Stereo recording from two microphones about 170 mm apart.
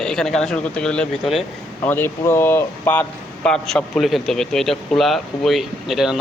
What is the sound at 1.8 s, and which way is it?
Speech, 10° left (ahead or behind).